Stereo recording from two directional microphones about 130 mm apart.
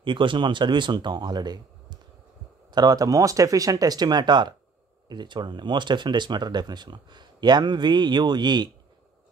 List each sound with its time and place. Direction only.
0.0 s speech: 40° right (ahead or behind)